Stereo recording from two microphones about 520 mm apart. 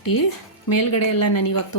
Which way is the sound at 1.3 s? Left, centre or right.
Left.